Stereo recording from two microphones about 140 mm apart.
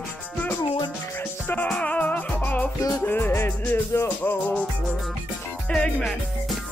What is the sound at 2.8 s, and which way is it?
Music, 25° left (ahead or behind).